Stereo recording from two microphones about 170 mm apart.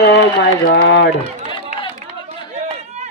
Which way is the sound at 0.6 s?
80° left.